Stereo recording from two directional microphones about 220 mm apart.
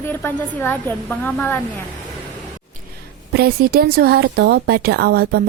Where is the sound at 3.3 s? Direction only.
45° right (ahead or behind).